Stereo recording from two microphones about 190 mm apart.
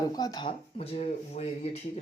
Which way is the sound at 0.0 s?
20° left (ahead or behind).